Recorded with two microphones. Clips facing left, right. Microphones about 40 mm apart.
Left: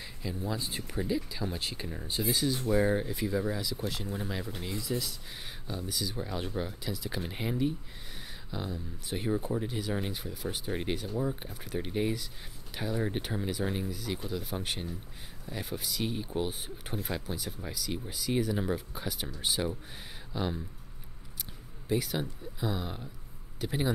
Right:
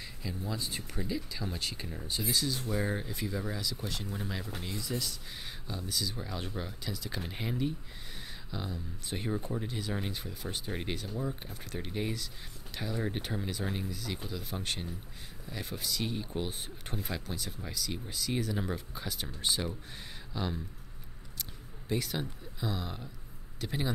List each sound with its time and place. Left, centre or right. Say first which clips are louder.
0.2 s speech: left 3 dB; centre